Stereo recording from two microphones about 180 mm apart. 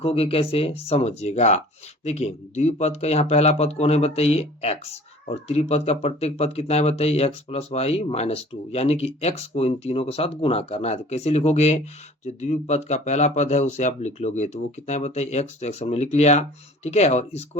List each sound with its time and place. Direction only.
0.0 s speech: 30° left (ahead or behind)